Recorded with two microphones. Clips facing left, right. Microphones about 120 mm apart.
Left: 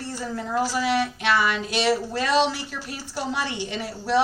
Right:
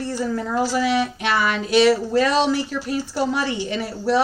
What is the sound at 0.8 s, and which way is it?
A woman's voice, 45° right (ahead or behind).